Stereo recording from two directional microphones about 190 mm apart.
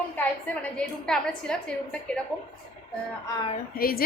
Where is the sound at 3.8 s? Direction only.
50° left (ahead or behind).